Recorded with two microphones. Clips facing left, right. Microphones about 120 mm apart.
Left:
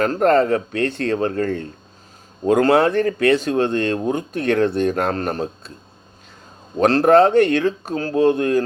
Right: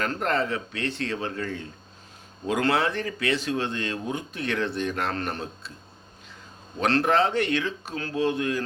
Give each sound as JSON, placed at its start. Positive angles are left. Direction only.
{"t": 0.0, "sound": "speech", "side_deg": 45}
{"t": 6.7, "sound": "speech", "side_deg": 45}